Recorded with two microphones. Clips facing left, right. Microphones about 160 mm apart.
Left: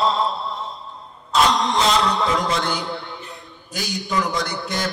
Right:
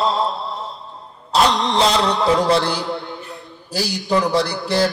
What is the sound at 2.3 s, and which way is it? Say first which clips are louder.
A man's voice: right 5 dB; 35° right (ahead or behind).